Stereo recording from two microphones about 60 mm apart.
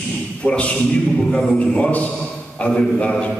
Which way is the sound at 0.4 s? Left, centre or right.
Centre.